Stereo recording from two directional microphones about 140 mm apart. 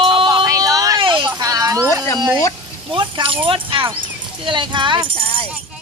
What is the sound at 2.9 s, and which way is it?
Speech, 40° right (ahead or behind).